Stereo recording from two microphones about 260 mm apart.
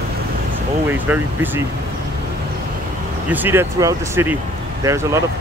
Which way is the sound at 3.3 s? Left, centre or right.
Centre.